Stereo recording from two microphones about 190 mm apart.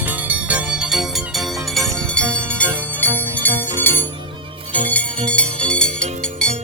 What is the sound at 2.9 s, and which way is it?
Jingle bell, 10° left (ahead or behind).